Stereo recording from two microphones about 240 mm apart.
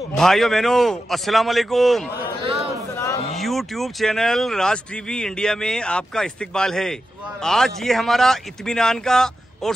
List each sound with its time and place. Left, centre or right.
0.2 s speech: centre
2.4 s a sound: right
3.3 s speech: centre